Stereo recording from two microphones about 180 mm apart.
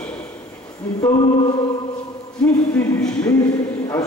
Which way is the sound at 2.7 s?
5° left (ahead or behind).